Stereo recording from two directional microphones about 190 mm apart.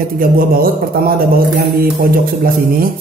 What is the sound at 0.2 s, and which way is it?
Speech, 50° right (ahead or behind).